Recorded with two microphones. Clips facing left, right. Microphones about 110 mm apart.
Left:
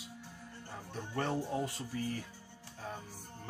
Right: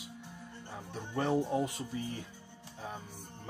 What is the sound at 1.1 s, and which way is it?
Speech, 15° right (ahead or behind).